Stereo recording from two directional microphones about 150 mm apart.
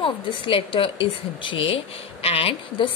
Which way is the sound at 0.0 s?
35° left (ahead or behind).